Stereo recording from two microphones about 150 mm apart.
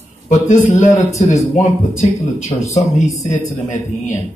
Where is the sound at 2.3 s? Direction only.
50° left (ahead or behind).